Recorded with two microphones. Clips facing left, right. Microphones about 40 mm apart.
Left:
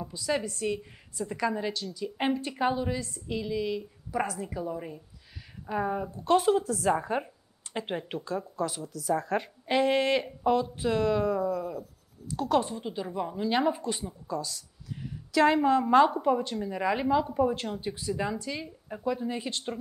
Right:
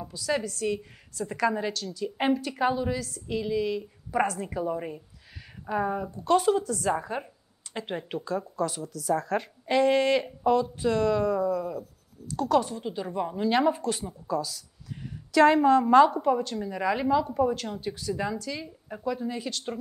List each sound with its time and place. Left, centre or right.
0.4 s speech: left
1.4 s a woman's voice: centre
2.6 s a woman's voice: centre
2.9 s speech: left
3.3 s a woman's voice: centre
4.4 s a woman's voice: centre
5.7 s a woman's voice: centre
7.7 s a sound: left
8.1 s a woman's voice: centre
12.8 s a woman's voice: centre
13.1 s a woman's voice: centre
13.5 s a woman's voice: centre
17.7 s speech: left
18.1 s a woman's voice: centre; by 19.6 s left